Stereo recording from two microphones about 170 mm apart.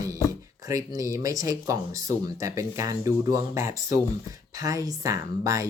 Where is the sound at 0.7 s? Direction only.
20° right (ahead or behind).